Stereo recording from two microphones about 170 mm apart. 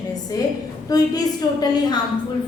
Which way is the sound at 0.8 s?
20° left (ahead or behind).